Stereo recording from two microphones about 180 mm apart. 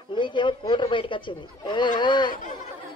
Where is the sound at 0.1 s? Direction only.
25° left (ahead or behind).